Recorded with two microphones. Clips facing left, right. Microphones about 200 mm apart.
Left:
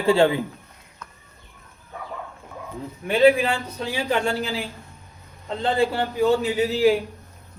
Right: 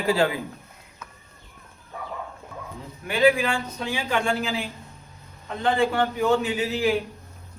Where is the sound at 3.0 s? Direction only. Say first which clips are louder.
Left 3 dB; 30° left (ahead or behind).